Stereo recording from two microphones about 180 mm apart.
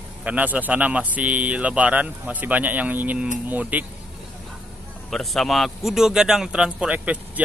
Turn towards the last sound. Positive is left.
turn(degrees=-10)  # may be behind; listen again after turning